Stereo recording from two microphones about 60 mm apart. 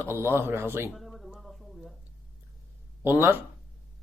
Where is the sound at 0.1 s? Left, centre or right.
Right.